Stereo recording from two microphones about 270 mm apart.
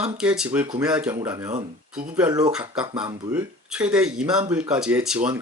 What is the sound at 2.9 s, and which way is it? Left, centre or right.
Speech, centre.